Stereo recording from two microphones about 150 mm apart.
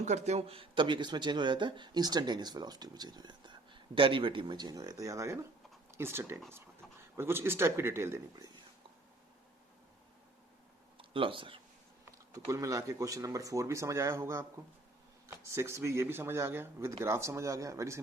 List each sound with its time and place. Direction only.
0.0 s a man's voice: 50° right (ahead or behind); by 8.4 s 15° right (ahead or behind)
10.9 s speech: 35° right (ahead or behind)
12.3 s a man's voice: 20° right (ahead or behind)
15.5 s a man's voice: 15° right (ahead or behind)